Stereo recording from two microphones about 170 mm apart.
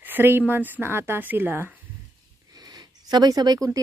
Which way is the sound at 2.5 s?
25° right (ahead or behind).